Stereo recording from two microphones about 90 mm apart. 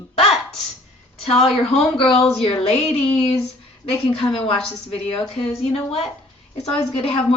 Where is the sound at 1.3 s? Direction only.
90° left.